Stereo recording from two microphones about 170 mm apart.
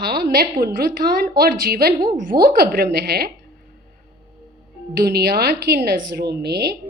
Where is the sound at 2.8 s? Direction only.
70° right (ahead or behind).